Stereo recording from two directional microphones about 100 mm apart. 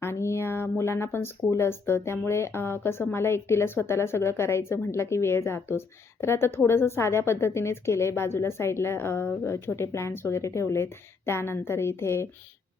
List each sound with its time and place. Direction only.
0.0 s speech: 25° left (ahead or behind)